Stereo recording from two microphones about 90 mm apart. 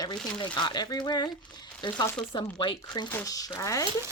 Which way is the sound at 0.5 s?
55° left (ahead or behind).